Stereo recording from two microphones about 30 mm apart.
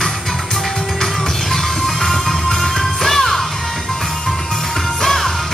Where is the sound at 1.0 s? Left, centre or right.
Centre.